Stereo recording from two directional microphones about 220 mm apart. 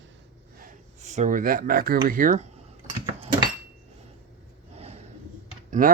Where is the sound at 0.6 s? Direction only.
30° right (ahead or behind).